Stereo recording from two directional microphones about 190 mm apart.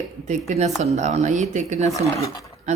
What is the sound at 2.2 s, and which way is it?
Speech, 15° left (ahead or behind).